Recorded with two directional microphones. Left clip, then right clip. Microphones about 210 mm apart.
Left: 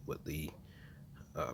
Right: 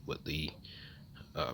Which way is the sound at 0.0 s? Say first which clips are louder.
Right 4 dB; centre (ahead or behind).